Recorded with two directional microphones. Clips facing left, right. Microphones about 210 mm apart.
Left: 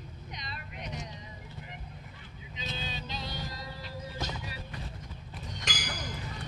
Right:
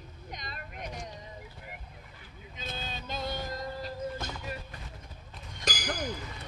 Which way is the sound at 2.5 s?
50° right (ahead or behind).